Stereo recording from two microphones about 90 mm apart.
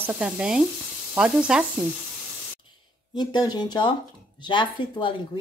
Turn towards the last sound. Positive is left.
turn(degrees=65)  # may be behind; listen again after turning